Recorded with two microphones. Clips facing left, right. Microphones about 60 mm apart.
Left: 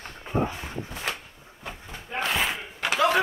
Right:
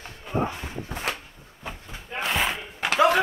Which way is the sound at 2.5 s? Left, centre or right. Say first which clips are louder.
Right 1 dB; centre.